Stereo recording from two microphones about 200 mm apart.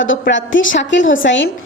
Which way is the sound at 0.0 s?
70° left (ahead or behind).